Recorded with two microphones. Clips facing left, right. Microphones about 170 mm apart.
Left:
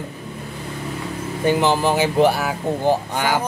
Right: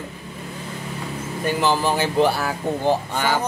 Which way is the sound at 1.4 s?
20° left (ahead or behind).